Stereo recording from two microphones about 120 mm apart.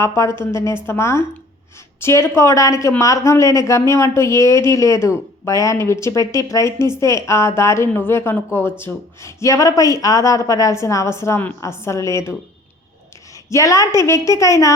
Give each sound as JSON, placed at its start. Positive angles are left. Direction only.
{"t": 0.0, "sound": "speech", "side_deg": 25}
{"t": 13.5, "sound": "speech", "side_deg": 25}